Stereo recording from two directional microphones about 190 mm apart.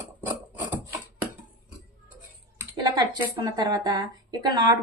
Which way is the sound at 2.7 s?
25° right (ahead or behind).